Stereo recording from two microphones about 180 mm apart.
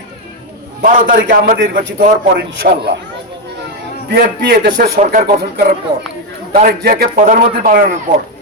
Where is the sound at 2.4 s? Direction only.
65° right (ahead or behind).